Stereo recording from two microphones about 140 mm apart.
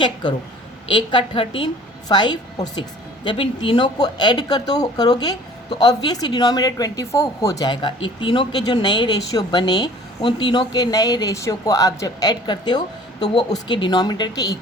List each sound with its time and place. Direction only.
0.0 s speech: 30° left (ahead or behind)